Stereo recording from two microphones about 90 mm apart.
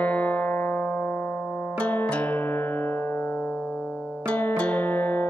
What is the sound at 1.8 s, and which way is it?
Music, 15° left (ahead or behind).